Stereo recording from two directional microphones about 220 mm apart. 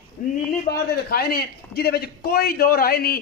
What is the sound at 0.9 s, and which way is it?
A man's voice, 45° left (ahead or behind).